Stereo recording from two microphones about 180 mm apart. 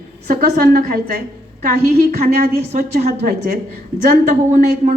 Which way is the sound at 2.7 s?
40° right (ahead or behind).